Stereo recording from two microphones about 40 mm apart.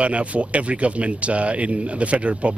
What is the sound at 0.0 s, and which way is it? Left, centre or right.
Speech, right.